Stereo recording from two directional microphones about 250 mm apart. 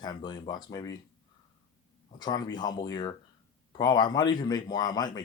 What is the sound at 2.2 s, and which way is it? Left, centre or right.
Speech, centre.